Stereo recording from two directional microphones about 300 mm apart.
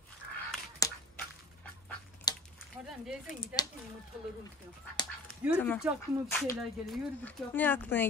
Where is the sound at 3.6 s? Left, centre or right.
Centre.